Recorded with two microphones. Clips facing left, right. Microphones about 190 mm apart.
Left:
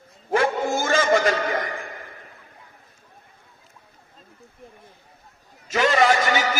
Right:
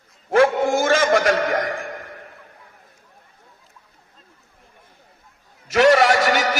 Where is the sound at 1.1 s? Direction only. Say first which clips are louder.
Right 2 dB; 60° right (ahead or behind).